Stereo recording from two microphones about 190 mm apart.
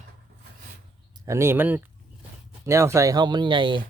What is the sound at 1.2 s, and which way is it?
A man's voice, 15° right (ahead or behind).